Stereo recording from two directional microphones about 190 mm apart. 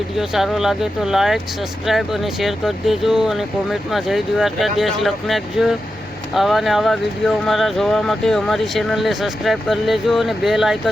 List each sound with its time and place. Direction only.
0.2 s speech: centre (ahead or behind)